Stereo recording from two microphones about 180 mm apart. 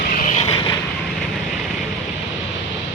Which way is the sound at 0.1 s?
45° left (ahead or behind).